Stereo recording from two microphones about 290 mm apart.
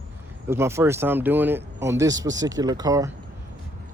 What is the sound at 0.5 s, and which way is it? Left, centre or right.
Speech, centre.